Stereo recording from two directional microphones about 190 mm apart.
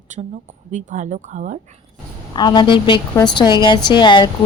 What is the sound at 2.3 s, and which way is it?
A woman's voice, 20° left (ahead or behind).